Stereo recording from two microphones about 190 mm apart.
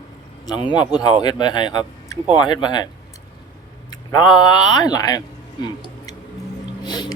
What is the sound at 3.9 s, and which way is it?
Speech, 20° left (ahead or behind).